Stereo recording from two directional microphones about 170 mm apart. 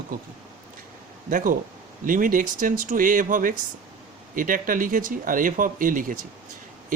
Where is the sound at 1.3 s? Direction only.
50° right (ahead or behind).